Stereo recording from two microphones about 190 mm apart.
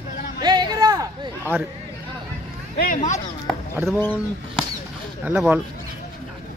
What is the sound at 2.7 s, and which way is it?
Speech, 45° left (ahead or behind).